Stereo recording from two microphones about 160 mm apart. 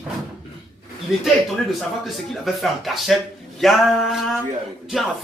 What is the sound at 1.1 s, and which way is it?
Speech, centre (ahead or behind).